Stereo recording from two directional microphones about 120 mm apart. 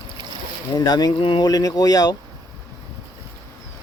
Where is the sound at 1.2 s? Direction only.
45° left (ahead or behind).